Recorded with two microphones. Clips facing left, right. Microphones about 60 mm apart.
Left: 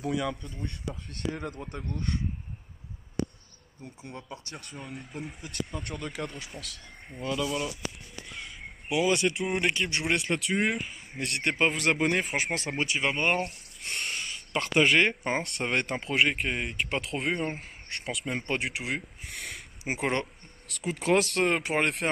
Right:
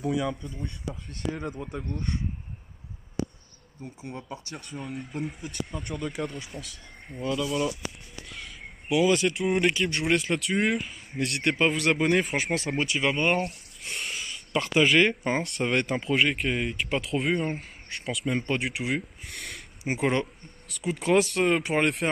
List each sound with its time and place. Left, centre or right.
0.0 s speech: centre
0.7 s speech: left
1.3 s speech: centre
3.8 s speech: centre
7.1 s speech: right
7.4 s speech: centre
12.8 s speech: left
13.1 s a sound: centre
14.6 s speech: centre